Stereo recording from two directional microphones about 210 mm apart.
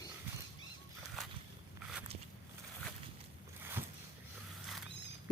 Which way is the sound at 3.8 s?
10° right (ahead or behind).